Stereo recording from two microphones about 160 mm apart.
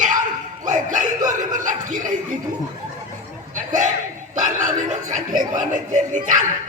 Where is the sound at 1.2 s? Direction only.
25° right (ahead or behind).